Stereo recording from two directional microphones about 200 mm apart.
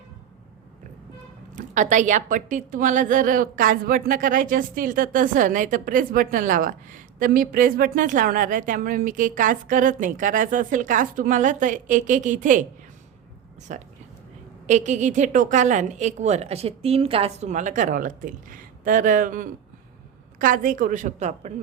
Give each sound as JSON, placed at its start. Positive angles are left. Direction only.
{"t": 1.5, "sound": "a woman's voice", "side_deg": -40}